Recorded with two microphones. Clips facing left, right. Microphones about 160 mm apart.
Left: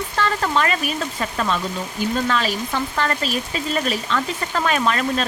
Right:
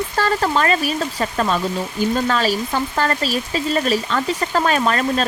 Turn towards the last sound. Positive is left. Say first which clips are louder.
# right 2 dB
turn(degrees=-40)  # may be behind; listen again after turning